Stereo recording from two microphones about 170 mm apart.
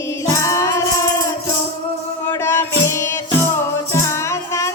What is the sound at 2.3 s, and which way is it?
Music, 15° left (ahead or behind).